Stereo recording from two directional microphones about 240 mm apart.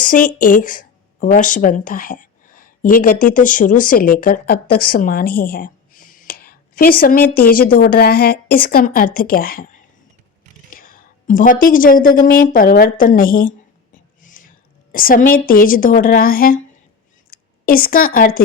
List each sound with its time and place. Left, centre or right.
0.0 s a woman's voice: left
14.2 s whispering: left
14.9 s a woman's voice: left